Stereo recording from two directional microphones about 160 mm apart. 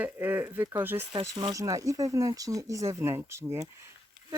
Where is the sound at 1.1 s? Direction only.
25° right (ahead or behind).